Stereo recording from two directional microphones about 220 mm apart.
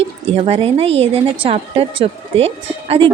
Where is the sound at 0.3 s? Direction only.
25° right (ahead or behind).